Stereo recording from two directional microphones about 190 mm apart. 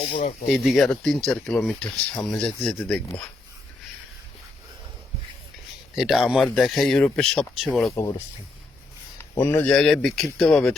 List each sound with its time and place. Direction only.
0.2 s speech: 40° left (ahead or behind)
0.4 s speech: centre (ahead or behind)
5.9 s speech: centre (ahead or behind)
9.1 s a sound: 15° left (ahead or behind)
9.7 s speech: 5° left (ahead or behind)